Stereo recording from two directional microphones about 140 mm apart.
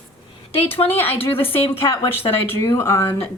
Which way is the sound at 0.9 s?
15° left (ahead or behind).